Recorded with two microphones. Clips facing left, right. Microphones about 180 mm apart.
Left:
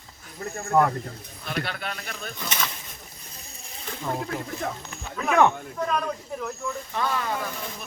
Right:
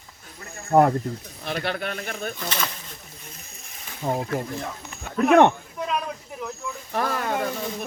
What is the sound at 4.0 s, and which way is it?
Speech, 55° right (ahead or behind).